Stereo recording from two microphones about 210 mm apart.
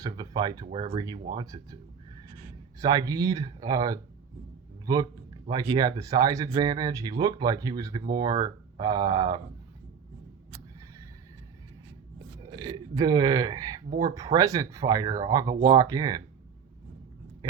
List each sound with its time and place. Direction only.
0.0 s speech: 20° right (ahead or behind)
12.4 s speech: 20° right (ahead or behind)